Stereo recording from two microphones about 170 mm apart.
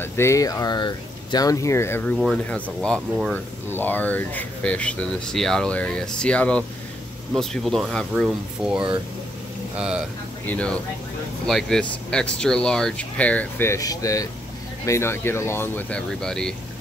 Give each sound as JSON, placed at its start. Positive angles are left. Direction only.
{"t": 0.0, "sound": "speech", "side_deg": 15}
{"t": 10.4, "sound": "speech", "side_deg": 10}